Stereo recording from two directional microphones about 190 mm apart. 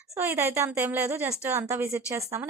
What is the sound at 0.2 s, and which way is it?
A woman's voice, 10° right (ahead or behind).